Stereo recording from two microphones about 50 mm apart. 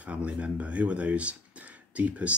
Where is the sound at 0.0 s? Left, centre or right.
Right.